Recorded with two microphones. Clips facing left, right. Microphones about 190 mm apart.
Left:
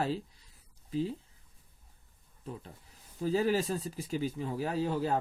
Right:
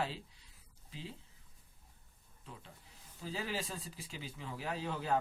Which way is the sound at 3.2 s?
45° left (ahead or behind).